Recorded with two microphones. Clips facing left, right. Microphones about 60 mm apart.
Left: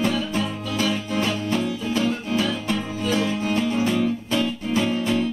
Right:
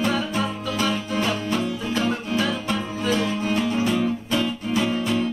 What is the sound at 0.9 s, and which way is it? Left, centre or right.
Music, centre.